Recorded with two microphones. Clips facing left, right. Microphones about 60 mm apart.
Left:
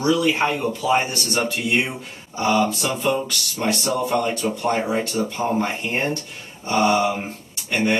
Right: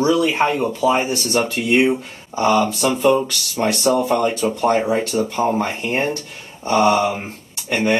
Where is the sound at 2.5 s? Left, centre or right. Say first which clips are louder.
Right 2 dB; centre.